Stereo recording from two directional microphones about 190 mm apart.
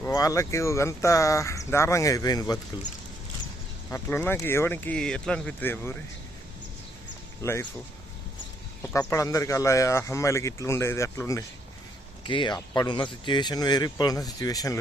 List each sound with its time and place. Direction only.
0.0 s speech: 15° left (ahead or behind)
3.9 s speech: 10° left (ahead or behind)
7.4 s speech: 15° left (ahead or behind)
8.8 s speech: 15° left (ahead or behind)
12.2 s speech: 25° left (ahead or behind)